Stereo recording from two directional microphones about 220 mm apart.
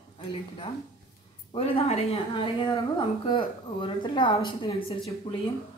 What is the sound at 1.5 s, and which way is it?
A woman's voice, 25° left (ahead or behind).